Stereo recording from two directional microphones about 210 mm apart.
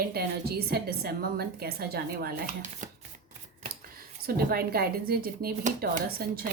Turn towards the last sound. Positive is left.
turn(degrees=-45)  # may be behind; listen again after turning